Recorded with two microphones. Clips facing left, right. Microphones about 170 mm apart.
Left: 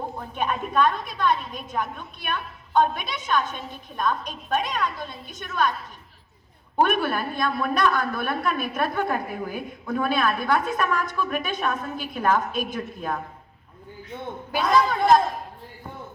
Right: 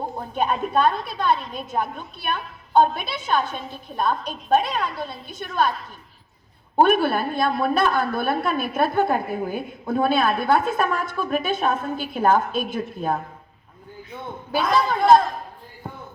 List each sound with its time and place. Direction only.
0.2 s a woman's voice: 30° right (ahead or behind)
6.7 s a woman's voice: 30° right (ahead or behind)
14.5 s a woman's voice: 30° right (ahead or behind)